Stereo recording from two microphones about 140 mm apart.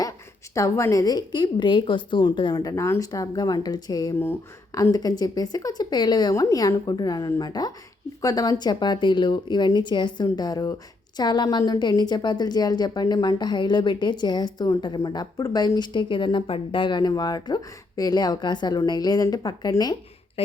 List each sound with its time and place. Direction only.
0.5 s a woman's voice: 20° left (ahead or behind)